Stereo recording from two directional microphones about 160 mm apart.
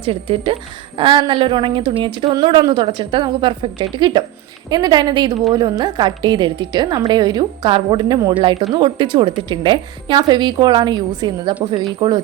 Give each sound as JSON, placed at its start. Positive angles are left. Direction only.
{"t": 0.0, "sound": "a woman's voice", "side_deg": -35}